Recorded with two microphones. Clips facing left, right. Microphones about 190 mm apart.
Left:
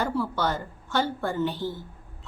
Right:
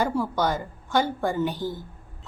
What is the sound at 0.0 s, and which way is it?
A woman's voice, 15° right (ahead or behind).